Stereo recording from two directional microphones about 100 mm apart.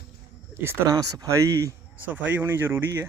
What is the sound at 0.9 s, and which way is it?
Speech, 40° right (ahead or behind).